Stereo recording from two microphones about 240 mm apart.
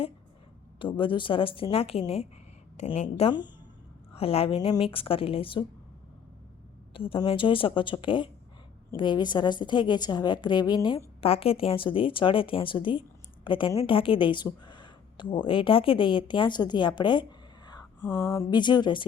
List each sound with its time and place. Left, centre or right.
0.8 s a woman's voice: left
6.9 s a woman's voice: left